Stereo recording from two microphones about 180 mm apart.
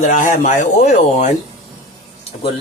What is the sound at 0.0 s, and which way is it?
Speech, 45° left (ahead or behind).